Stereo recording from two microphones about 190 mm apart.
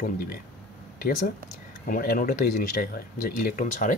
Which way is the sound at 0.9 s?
50° left (ahead or behind).